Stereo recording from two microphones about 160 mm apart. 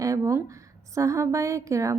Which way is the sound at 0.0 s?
20° right (ahead or behind).